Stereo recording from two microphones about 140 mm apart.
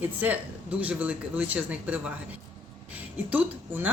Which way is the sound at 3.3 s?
10° right (ahead or behind).